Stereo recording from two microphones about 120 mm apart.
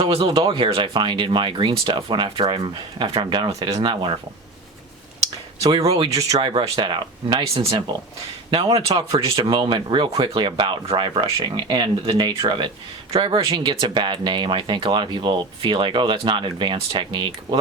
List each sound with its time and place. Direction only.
0.0 s speech: 50° right (ahead or behind)
5.8 s speech: 55° right (ahead or behind)
6.4 s speech: 45° right (ahead or behind)
8.4 s speech: 40° right (ahead or behind)